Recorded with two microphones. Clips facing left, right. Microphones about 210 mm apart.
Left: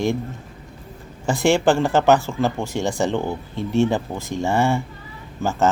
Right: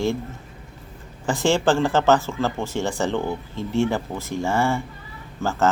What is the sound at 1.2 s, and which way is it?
Speech, 15° left (ahead or behind).